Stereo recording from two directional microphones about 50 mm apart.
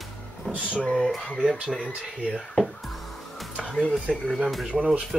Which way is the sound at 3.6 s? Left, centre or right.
Centre.